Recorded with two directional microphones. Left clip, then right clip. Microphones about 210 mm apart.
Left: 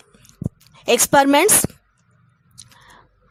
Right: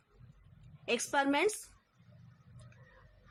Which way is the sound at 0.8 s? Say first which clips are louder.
Left 17 dB; 50° left (ahead or behind).